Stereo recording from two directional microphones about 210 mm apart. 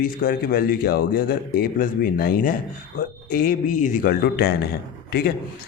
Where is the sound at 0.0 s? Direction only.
40° left (ahead or behind).